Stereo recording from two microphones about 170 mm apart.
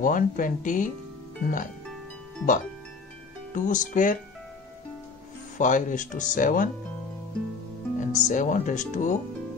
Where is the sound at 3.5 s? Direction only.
50° left (ahead or behind).